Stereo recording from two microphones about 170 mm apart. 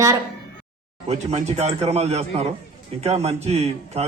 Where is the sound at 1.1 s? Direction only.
40° right (ahead or behind).